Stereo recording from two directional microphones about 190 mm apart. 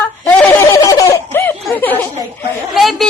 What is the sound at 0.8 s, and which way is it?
Laughter, 20° left (ahead or behind).